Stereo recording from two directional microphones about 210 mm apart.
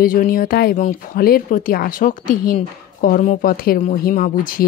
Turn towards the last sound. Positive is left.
turn(degrees=40)  # may be behind; listen again after turning